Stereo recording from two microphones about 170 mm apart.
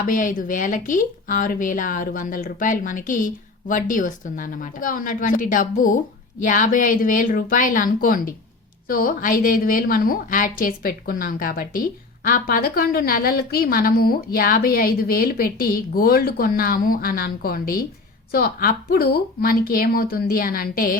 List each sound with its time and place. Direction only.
0.0 s a woman's voice: 50° left (ahead or behind)